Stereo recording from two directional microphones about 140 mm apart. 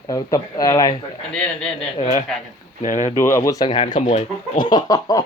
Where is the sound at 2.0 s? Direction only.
55° left (ahead or behind).